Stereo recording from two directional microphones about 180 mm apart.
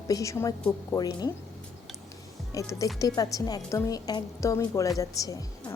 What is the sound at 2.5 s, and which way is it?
A woman's voice, 15° left (ahead or behind).